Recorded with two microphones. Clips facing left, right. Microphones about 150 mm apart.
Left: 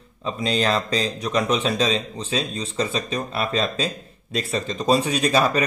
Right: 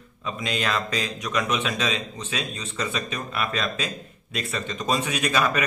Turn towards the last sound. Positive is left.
turn(degrees=35)  # may be behind; listen again after turning